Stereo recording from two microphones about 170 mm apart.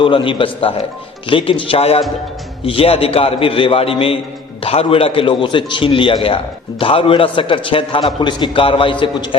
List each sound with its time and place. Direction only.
0.0 s a man's voice: 30° left (ahead or behind)